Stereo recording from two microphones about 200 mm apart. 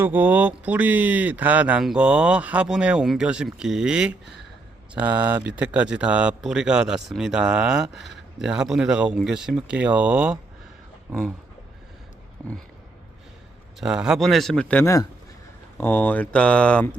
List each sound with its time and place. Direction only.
0.0 s speech: 10° right (ahead or behind)
12.4 s speech: 5° left (ahead or behind)
13.7 s speech: 5° right (ahead or behind)